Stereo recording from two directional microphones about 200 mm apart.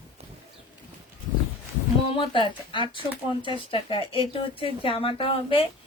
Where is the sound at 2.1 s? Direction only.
25° left (ahead or behind).